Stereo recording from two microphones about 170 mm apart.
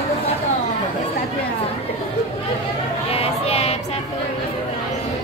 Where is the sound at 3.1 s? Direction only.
35° left (ahead or behind).